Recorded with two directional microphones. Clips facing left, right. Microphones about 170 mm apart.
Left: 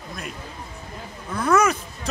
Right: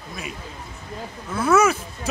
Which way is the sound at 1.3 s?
5° right (ahead or behind).